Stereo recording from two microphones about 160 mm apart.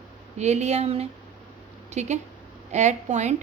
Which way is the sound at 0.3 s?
45° right (ahead or behind).